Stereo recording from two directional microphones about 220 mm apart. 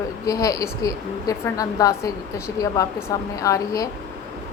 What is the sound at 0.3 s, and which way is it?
A woman's voice, 15° left (ahead or behind).